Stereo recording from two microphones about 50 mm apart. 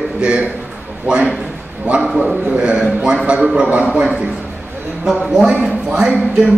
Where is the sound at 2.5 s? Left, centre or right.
Centre.